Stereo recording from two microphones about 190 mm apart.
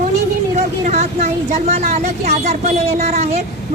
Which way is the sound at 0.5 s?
35° right (ahead or behind).